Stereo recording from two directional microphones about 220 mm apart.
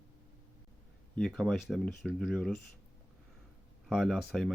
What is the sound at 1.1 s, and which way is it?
Speech, 5° left (ahead or behind).